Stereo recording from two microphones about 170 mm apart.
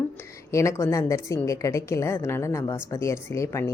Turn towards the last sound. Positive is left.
turn(degrees=15)  # may be behind; listen again after turning